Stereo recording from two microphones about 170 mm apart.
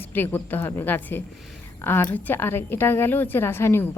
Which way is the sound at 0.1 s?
10° left (ahead or behind).